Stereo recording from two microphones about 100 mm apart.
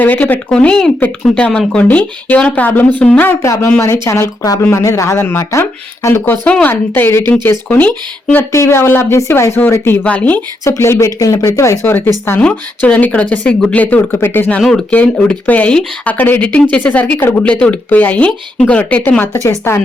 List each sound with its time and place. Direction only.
0.0 s speech: 15° left (ahead or behind)
3.4 s speech: 30° left (ahead or behind)
8.5 s speech: 30° left (ahead or behind)
10.6 s speech: 25° left (ahead or behind)